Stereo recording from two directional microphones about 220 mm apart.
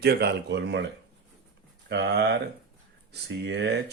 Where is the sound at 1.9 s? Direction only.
50° right (ahead or behind).